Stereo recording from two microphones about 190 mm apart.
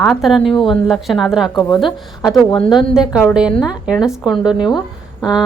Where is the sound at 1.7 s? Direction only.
25° left (ahead or behind).